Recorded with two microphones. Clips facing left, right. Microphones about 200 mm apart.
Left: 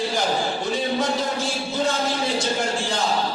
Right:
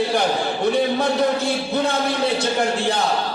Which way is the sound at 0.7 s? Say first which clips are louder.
Right 6 dB; 60° right (ahead or behind).